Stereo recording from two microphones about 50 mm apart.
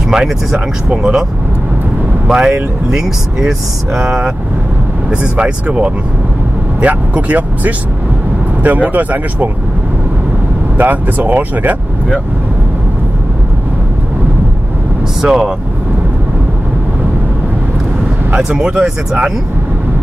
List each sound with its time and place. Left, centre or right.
0.1 s speech: centre
2.2 s speech: centre
4.0 s speech: centre
10.8 s speech: right
15.2 s speech: centre
18.3 s speech: centre